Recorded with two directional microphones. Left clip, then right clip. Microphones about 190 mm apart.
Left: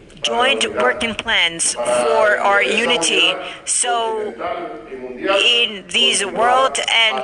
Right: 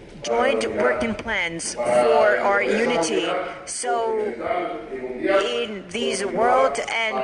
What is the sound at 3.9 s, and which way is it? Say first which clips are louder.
Speech: left 3 dB; 20° right (ahead or behind).